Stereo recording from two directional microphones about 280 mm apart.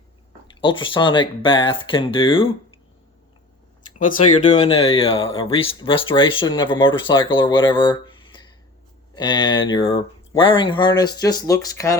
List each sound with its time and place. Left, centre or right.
0.4 s speech: centre
3.9 s speech: left